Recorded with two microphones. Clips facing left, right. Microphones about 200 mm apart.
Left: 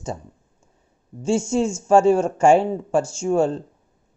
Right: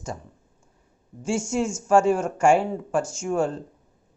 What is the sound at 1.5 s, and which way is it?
Speech, 25° left (ahead or behind).